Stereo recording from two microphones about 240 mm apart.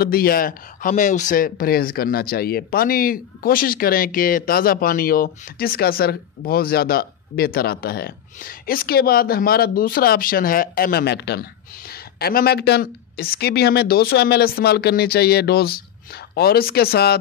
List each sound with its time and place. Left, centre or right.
0.0 s speech: left